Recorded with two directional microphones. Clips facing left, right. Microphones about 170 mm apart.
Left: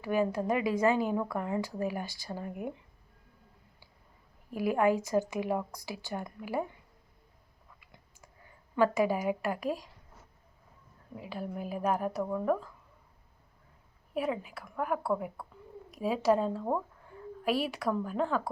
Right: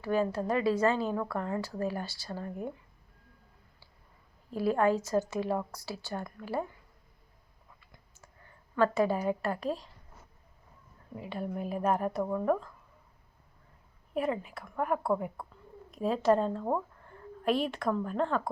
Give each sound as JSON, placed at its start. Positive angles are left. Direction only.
{"t": 0.0, "sound": "speech", "side_deg": 15}
{"t": 4.5, "sound": "speech", "side_deg": 15}
{"t": 8.7, "sound": "speech", "side_deg": 10}
{"t": 11.1, "sound": "a woman's voice", "side_deg": 0}
{"t": 14.1, "sound": "a woman's voice", "side_deg": 5}